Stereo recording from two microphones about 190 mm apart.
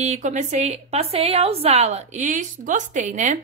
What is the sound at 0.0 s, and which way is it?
A woman's voice, 40° right (ahead or behind).